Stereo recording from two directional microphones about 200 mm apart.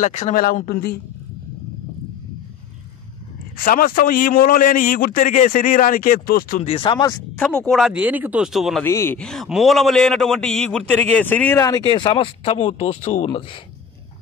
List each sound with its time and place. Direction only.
0.0 s a man's voice: 35° left (ahead or behind)
3.5 s a man's voice: 45° left (ahead or behind)
6.6 s speech: 25° left (ahead or behind)
7.3 s speech: 5° left (ahead or behind)
8.8 s a man's voice: 10° left (ahead or behind)